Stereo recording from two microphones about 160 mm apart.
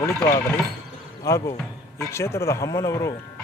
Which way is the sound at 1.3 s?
15° left (ahead or behind).